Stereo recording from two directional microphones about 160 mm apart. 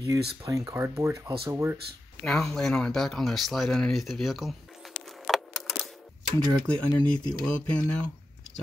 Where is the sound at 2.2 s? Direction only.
5° left (ahead or behind).